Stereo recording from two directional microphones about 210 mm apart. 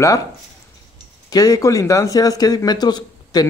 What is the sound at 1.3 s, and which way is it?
Speech, 15° left (ahead or behind).